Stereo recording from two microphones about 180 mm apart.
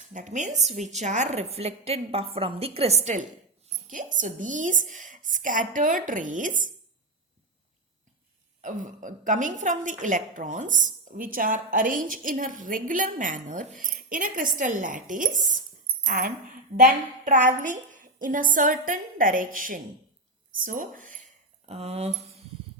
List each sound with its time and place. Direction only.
0.1 s a woman's voice: 45° right (ahead or behind)
8.6 s a woman's voice: 45° right (ahead or behind)
21.7 s speech: 35° right (ahead or behind)